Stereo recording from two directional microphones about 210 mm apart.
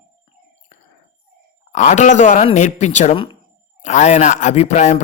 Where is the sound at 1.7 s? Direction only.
35° left (ahead or behind).